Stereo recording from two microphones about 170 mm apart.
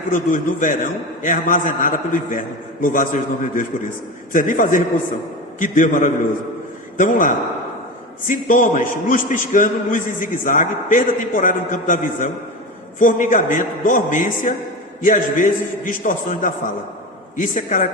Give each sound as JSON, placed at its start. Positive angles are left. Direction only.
{"t": 0.1, "sound": "a man's voice", "side_deg": 50}